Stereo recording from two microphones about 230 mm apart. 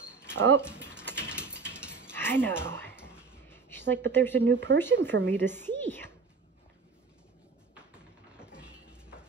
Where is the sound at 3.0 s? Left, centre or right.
Centre.